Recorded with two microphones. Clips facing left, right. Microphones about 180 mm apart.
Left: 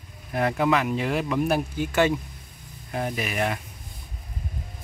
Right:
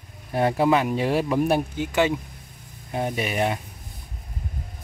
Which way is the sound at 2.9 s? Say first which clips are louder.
Right 2 dB; 25° right (ahead or behind).